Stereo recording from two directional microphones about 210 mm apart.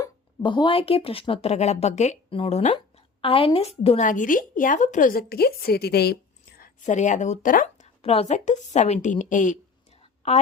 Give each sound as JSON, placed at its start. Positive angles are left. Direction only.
{"t": 0.0, "sound": "speech", "side_deg": 20}
{"t": 6.6, "sound": "speech", "side_deg": 35}